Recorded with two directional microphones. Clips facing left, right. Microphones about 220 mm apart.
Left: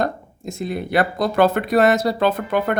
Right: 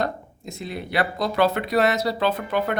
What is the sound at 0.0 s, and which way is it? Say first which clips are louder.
Speech: left 4 dB; 45° left (ahead or behind).